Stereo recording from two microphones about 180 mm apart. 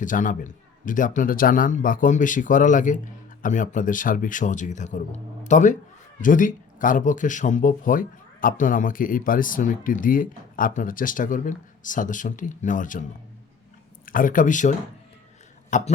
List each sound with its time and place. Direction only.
0.0 s speech: 45° left (ahead or behind)